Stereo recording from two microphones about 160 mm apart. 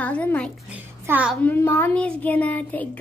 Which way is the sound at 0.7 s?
10° right (ahead or behind).